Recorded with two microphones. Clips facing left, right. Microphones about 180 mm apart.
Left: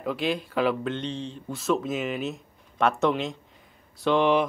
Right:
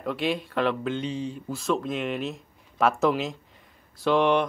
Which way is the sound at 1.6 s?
Centre (ahead or behind).